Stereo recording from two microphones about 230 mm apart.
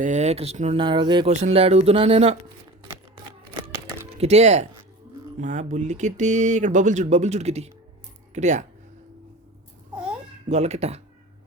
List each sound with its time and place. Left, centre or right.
0.0 s speech: right
3.5 s crumpling: right
5.4 s speech: right
9.9 s babbling: centre
10.5 s speech: right